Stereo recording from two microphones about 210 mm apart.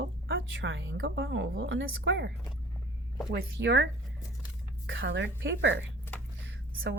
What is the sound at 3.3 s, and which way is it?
Speech, 55° right (ahead or behind).